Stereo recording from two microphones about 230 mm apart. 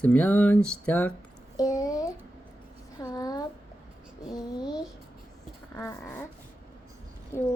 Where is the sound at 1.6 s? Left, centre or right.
Centre.